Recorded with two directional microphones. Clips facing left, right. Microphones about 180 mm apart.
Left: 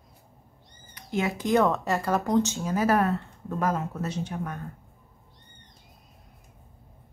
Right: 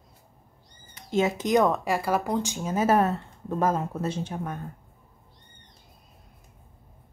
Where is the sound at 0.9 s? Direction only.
25° right (ahead or behind).